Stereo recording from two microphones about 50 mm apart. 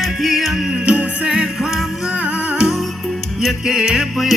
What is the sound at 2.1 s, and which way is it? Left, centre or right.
Humming, right.